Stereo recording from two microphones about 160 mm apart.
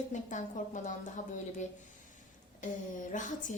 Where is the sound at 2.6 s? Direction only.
50° left (ahead or behind).